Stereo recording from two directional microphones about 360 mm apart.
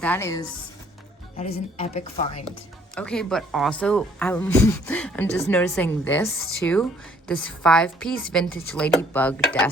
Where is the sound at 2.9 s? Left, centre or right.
Centre.